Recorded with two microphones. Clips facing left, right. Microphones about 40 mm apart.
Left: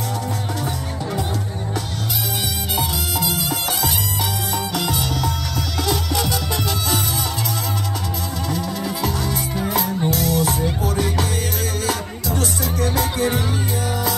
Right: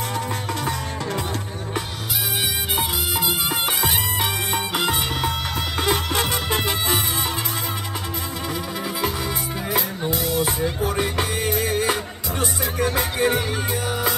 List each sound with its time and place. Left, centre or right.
2.8 s music: right
8.5 s music: centre
11.8 s music: right